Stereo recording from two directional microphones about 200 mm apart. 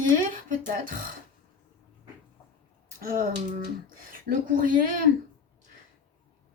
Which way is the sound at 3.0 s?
45° right (ahead or behind).